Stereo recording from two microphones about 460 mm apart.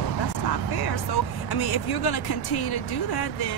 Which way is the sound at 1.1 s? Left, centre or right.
Left.